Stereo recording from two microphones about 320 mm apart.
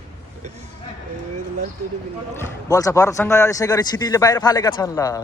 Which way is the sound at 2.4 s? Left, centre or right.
Centre.